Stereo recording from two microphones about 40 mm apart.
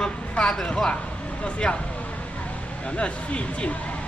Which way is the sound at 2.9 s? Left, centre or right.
Left.